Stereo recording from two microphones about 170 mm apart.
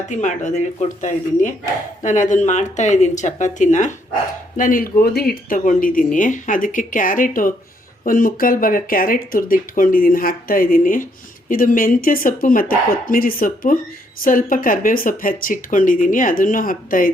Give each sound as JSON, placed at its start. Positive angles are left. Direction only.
{"t": 0.1, "sound": "speech", "side_deg": 45}